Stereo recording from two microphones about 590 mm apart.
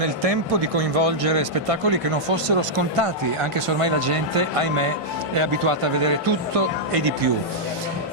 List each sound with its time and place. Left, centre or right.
0.0 s speech: right